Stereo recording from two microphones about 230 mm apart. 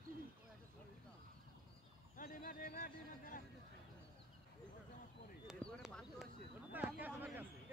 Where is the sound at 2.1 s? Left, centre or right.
Left.